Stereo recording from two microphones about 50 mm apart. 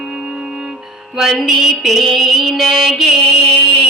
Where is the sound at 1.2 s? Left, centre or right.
Centre.